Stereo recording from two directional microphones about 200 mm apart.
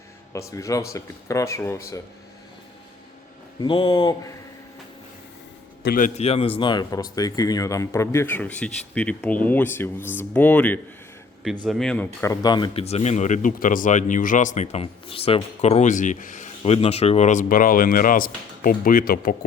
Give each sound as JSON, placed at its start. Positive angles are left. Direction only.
{"t": 0.3, "sound": "speech", "side_deg": 15}
{"t": 3.6, "sound": "speech", "side_deg": 20}
{"t": 5.8, "sound": "a man's voice", "side_deg": 45}
{"t": 6.1, "sound": "speech", "side_deg": 30}